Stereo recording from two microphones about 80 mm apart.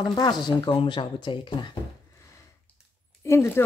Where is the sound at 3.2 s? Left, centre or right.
Left.